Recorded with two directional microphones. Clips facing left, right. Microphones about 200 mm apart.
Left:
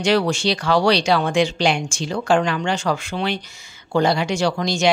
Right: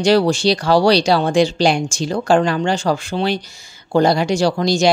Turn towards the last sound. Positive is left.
turn(degrees=-35)  # may be behind; listen again after turning